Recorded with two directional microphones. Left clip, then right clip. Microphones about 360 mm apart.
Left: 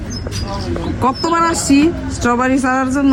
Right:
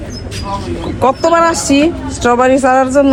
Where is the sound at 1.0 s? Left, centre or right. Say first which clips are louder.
Right 5 dB; centre.